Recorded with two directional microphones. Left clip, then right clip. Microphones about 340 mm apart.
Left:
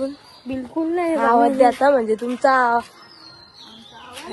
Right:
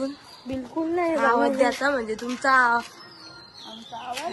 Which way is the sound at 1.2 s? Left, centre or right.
Centre.